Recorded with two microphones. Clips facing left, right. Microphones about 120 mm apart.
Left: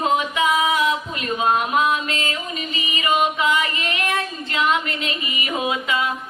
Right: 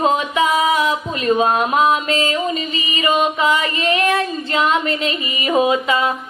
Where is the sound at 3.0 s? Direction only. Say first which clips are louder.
Right 3 dB; 35° right (ahead or behind).